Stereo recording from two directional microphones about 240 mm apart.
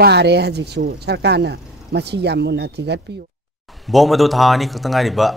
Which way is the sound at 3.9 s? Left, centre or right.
Centre.